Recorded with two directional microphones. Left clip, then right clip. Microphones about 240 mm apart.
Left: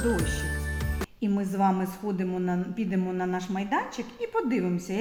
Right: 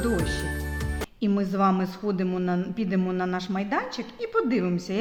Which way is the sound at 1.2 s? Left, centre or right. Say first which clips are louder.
Right 2 dB; right.